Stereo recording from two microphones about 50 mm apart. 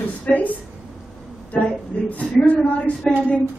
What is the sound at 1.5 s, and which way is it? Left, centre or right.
Speech, left.